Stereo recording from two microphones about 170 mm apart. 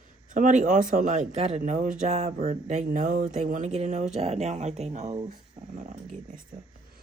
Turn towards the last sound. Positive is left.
turn(degrees=-55)  # may be behind; listen again after turning